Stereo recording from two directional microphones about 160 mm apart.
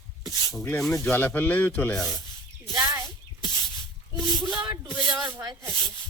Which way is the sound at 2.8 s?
20° right (ahead or behind).